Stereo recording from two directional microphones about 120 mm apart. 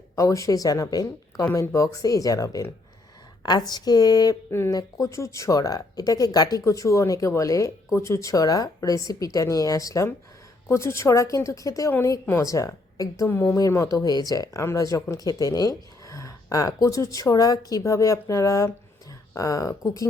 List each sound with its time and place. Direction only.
0.2 s speech: 25° left (ahead or behind)
4.5 s a woman's voice: 20° left (ahead or behind)
12.5 s speech: 25° left (ahead or behind)